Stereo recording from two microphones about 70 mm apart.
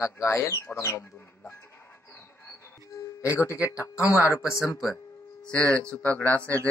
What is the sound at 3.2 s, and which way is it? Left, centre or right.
Speech, left.